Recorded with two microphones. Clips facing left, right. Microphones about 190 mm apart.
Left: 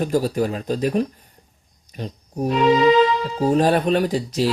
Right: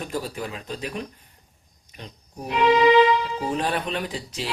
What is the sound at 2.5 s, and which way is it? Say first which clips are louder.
Music: left 2 dB; 10° right (ahead or behind).